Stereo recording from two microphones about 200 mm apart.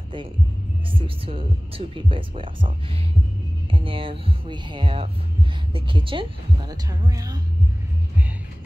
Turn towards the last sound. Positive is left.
turn(degrees=-20)  # may be behind; listen again after turning